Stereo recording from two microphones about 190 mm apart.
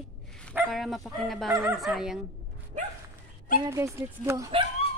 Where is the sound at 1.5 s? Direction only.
10° right (ahead or behind).